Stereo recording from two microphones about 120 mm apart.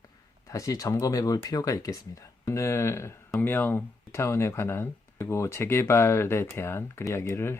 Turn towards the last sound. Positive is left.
turn(degrees=20)  # may be behind; listen again after turning